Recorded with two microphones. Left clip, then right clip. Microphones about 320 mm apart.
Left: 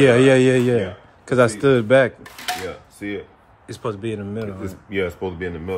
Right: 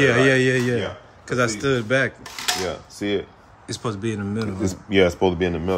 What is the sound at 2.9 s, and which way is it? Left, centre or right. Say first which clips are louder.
Speech: right 6 dB; right.